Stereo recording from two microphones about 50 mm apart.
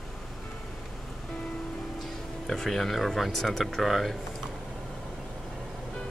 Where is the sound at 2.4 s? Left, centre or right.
Centre.